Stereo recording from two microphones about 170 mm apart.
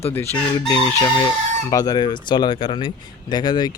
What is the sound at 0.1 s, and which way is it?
Speech, 10° left (ahead or behind).